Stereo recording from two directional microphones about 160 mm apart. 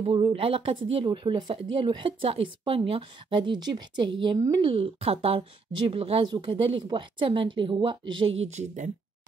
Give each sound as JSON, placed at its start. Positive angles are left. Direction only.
{"t": 0.0, "sound": "speech", "side_deg": -35}
{"t": 8.5, "sound": "speech", "side_deg": -45}